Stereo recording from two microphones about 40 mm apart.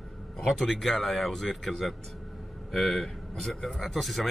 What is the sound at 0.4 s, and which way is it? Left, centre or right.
Speech, centre.